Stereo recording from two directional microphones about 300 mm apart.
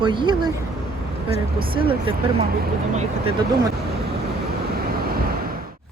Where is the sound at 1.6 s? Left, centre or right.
Centre.